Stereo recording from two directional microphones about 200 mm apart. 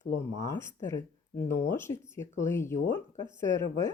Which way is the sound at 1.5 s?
15° left (ahead or behind).